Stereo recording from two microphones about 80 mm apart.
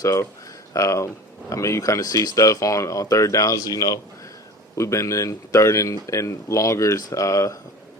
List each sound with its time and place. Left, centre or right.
0.0 s speech: left
4.7 s speech: left